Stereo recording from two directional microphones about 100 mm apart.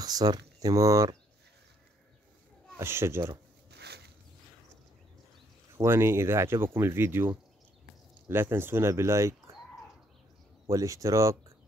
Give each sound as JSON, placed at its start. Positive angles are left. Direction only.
{"t": 0.0, "sound": "speech", "side_deg": -40}
{"t": 2.8, "sound": "speech", "side_deg": -25}
{"t": 5.8, "sound": "speech", "side_deg": -25}
{"t": 10.7, "sound": "speech", "side_deg": -35}